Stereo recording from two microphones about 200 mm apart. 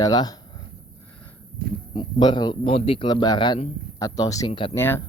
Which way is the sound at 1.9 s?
20° left (ahead or behind).